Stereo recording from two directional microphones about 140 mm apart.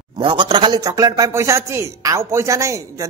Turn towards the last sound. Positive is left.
turn(degrees=-20)  # may be behind; listen again after turning